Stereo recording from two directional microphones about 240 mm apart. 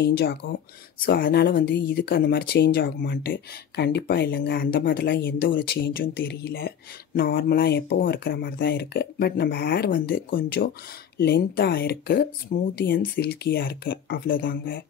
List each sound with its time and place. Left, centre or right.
0.0 s speech: left